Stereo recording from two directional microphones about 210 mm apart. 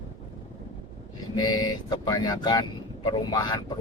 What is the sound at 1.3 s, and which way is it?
Speech, 20° left (ahead or behind).